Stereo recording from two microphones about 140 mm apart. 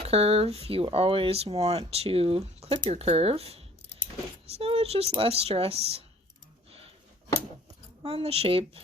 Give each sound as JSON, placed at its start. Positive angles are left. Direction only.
{"t": 0.0, "sound": "speech", "side_deg": -45}
{"t": 6.7, "sound": "a sound", "side_deg": -45}
{"t": 8.0, "sound": "speech", "side_deg": -45}